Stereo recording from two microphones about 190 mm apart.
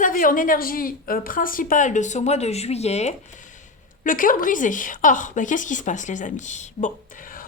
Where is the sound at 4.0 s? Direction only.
45° left (ahead or behind).